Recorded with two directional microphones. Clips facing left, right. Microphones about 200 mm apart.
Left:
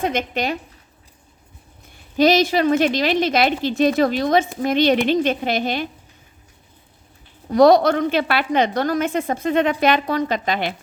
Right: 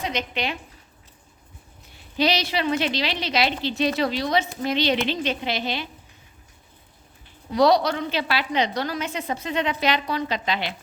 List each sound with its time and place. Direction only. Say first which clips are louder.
0.0 s a woman's voice: left 6 dB; 50° left (ahead or behind)
1.9 s a woman's voice: left 7 dB; 45° left (ahead or behind)
7.5 s a woman's voice: left 6 dB; 50° left (ahead or behind)